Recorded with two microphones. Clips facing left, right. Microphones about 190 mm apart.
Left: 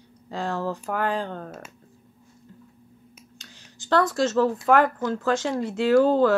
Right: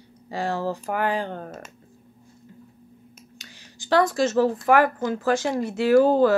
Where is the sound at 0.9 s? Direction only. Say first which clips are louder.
Right 1 dB; 70° right (ahead or behind).